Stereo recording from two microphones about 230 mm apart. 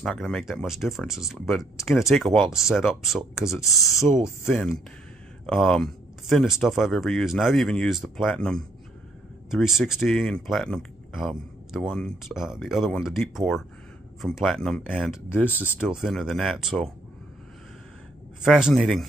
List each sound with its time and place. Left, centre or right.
0.0 s speech: centre
1.5 s speech: centre
1.9 s speech: centre
18.4 s speech: centre